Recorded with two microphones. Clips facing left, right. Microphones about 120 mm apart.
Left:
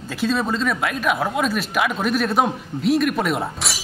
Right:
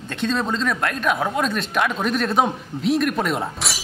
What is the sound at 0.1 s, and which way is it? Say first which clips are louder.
Speech: left 1 dB; 5° left (ahead or behind).